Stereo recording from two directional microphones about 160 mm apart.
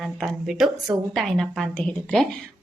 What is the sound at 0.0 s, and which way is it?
Speech, centre (ahead or behind).